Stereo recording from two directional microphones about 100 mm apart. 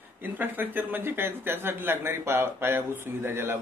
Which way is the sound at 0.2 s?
20° right (ahead or behind).